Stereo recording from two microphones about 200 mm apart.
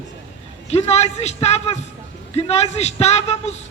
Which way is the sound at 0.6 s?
35° left (ahead or behind).